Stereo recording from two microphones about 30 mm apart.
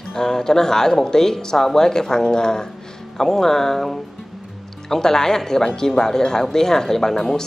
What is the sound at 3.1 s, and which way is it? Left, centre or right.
Speech, centre.